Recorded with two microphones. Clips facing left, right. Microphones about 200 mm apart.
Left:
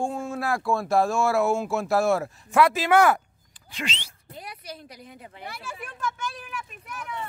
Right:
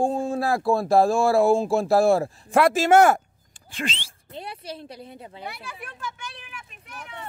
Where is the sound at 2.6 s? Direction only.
45° right (ahead or behind).